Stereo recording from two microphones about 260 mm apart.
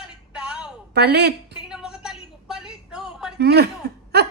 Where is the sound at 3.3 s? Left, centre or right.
Right.